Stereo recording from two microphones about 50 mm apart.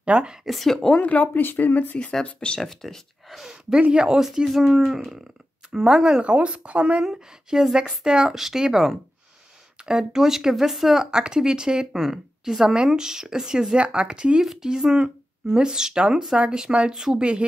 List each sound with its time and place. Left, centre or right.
0.0 s speech: right
0.5 s a woman's voice: centre
0.9 s speech: left
2.2 s speech: left
2.6 s speech: centre
3.9 s speech: centre
4.2 s speech: centre
6.2 s speech: right
7.1 s speech: centre
11.1 s speech: centre
14.4 s speech: centre
17.2 s speech: right